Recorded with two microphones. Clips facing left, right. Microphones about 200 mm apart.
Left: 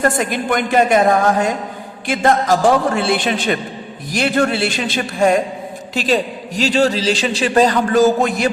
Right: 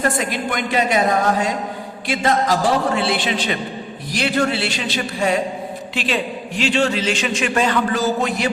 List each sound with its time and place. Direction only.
0.0 s a man's voice: 50° left (ahead or behind)